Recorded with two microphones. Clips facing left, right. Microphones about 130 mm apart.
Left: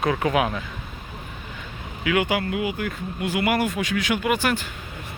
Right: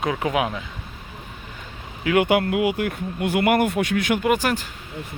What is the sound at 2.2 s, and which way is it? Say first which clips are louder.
Speech: right 5 dB; 60° right (ahead or behind).